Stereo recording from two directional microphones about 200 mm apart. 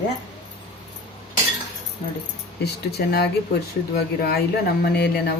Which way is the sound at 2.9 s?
55° left (ahead or behind).